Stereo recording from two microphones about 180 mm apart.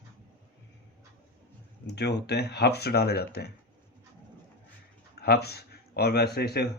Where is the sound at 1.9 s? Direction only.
70° left (ahead or behind).